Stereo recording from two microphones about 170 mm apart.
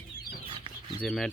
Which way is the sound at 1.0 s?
5° left (ahead or behind).